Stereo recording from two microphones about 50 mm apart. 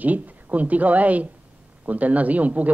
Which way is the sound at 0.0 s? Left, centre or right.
Right.